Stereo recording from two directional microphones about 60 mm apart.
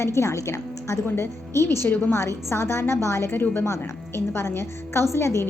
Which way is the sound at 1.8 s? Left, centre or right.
Left.